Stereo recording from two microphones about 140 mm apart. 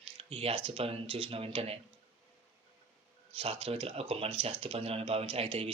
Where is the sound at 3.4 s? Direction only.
40° right (ahead or behind).